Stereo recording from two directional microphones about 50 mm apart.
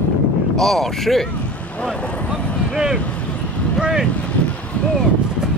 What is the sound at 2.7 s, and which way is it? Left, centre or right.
Vehicle, centre.